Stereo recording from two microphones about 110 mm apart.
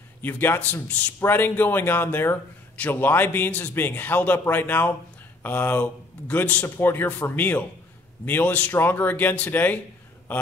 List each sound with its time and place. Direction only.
0.2 s a man's voice: 20° left (ahead or behind)